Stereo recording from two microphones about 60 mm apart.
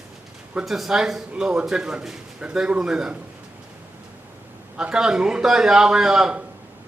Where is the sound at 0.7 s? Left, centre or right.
Centre.